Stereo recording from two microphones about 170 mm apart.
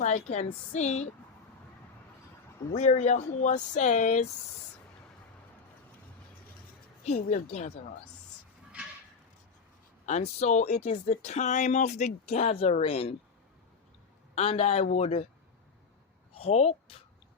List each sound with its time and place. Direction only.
0.0 s speech: 40° left (ahead or behind)
2.7 s speech: 45° left (ahead or behind)
7.0 s speech: 45° left (ahead or behind)
10.1 s speech: 40° left (ahead or behind)
14.3 s speech: 40° left (ahead or behind)
16.3 s speech: 35° left (ahead or behind)